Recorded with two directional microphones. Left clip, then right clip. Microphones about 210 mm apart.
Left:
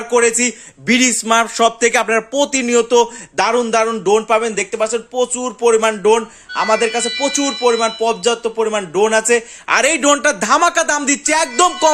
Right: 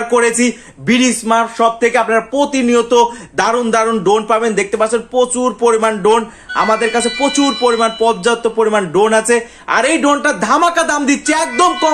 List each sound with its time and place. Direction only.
0.1 s speech: 15° left (ahead or behind)
0.9 s speech: 35° left (ahead or behind); by 9.4 s 20° left (ahead or behind)
9.6 s a man's voice: 35° left (ahead or behind)